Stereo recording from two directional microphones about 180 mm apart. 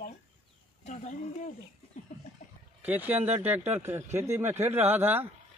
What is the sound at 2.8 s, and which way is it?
Speech, 10° right (ahead or behind).